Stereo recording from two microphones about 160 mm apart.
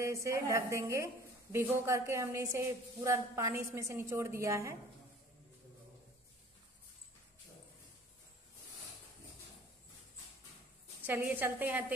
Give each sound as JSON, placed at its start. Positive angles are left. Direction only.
{"t": 0.0, "sound": "a woman's voice", "side_deg": -20}
{"t": 11.1, "sound": "a woman's voice", "side_deg": -10}